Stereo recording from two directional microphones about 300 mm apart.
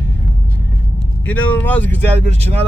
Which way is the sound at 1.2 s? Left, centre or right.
Centre.